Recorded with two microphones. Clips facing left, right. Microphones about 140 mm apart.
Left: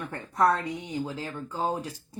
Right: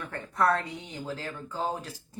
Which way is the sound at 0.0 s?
15° left (ahead or behind).